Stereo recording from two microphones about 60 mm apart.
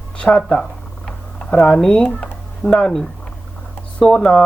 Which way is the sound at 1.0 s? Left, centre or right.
Centre.